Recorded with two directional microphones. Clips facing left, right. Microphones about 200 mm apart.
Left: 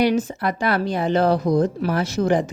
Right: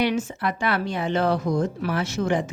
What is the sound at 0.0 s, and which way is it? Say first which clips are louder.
Speech: left 4 dB; 40° left (ahead or behind).